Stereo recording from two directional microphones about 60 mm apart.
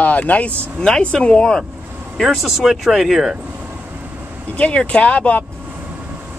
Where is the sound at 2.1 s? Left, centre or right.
Centre.